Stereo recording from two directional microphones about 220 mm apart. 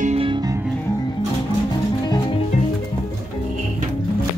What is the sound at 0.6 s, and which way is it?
Music, 5° left (ahead or behind).